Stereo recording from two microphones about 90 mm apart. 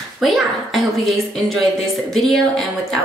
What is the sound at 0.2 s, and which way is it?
A woman's voice, centre (ahead or behind).